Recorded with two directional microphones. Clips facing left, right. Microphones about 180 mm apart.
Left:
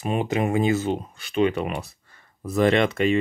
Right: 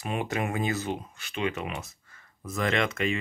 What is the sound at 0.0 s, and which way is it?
Speech, 20° left (ahead or behind).